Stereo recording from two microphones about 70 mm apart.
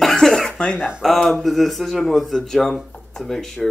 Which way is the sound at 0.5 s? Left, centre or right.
Centre.